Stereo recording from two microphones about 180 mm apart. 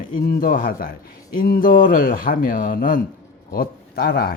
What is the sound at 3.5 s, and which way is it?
Speech, 60° left (ahead or behind).